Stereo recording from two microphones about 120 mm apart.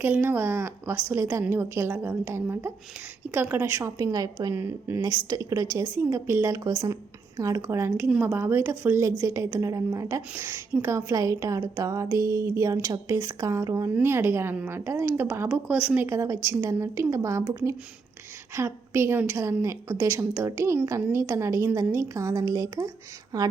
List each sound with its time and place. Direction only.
0.0 s a woman's voice: 15° right (ahead or behind)
16.0 s a woman's voice: 25° right (ahead or behind)